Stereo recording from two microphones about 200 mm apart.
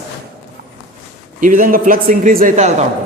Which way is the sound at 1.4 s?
40° right (ahead or behind).